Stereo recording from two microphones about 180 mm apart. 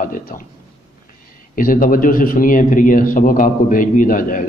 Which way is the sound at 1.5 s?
50° left (ahead or behind).